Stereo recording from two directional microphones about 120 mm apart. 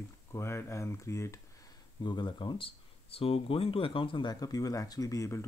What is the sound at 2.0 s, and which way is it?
Speech, 40° left (ahead or behind).